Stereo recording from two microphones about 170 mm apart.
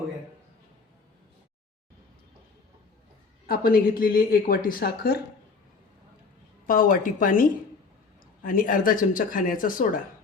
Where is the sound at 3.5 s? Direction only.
60° left (ahead or behind).